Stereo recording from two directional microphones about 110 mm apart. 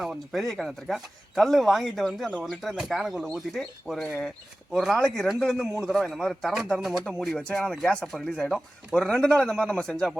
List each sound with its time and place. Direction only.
0.0 s speech: centre (ahead or behind)